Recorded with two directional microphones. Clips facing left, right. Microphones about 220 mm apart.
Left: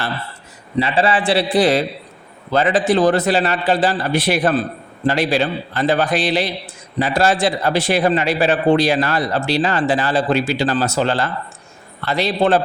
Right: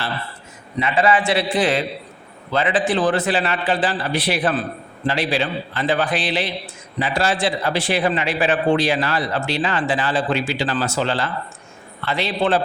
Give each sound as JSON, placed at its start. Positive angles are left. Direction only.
{"t": 0.8, "sound": "a man's voice", "side_deg": 30}